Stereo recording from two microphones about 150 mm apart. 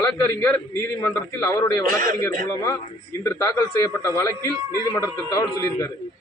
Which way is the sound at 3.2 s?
25° left (ahead or behind).